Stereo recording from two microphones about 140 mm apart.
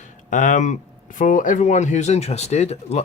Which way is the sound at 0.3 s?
65° left (ahead or behind).